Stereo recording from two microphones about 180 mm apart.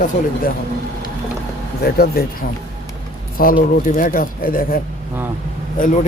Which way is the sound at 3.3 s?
50° left (ahead or behind).